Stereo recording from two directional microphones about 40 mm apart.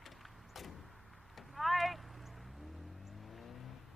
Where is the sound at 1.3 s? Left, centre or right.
Centre.